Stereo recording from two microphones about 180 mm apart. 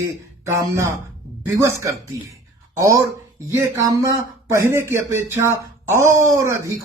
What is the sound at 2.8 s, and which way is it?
Speech, 15° right (ahead or behind).